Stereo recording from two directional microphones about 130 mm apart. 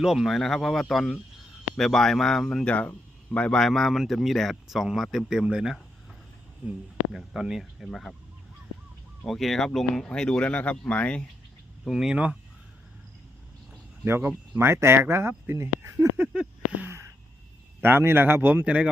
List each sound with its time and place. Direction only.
0.0 s speech: 5° right (ahead or behind)
9.2 s speech: centre (ahead or behind)
11.9 s speech: 5° right (ahead or behind)
14.2 s speech: 15° right (ahead or behind)